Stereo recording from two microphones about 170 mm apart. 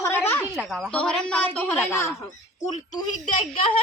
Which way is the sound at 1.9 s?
15° left (ahead or behind).